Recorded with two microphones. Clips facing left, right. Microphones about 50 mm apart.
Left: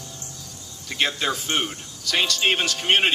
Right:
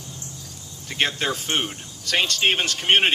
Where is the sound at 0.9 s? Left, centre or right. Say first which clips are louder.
Even; right.